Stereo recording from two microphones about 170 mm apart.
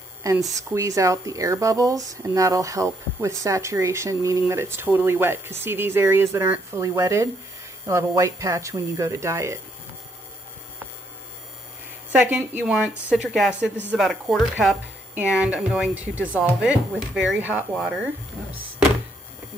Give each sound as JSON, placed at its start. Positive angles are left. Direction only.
{"t": 0.2, "sound": "speech", "side_deg": -20}
{"t": 12.1, "sound": "speech", "side_deg": -10}